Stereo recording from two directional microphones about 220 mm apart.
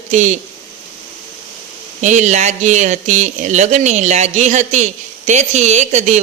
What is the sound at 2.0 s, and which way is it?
Speech, 35° right (ahead or behind).